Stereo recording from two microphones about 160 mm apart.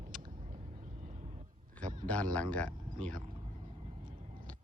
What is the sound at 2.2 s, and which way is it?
Speech, 60° right (ahead or behind).